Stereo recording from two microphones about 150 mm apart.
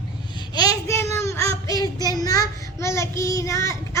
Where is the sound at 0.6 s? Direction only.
25° left (ahead or behind).